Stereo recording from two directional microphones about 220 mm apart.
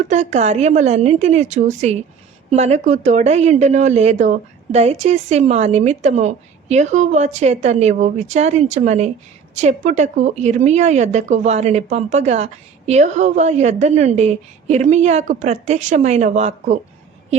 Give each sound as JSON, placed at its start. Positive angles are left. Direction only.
{"t": 0.0, "sound": "speech", "side_deg": -30}